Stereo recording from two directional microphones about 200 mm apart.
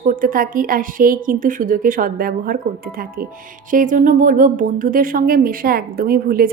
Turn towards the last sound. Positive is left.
turn(degrees=-50)  # may be behind; listen again after turning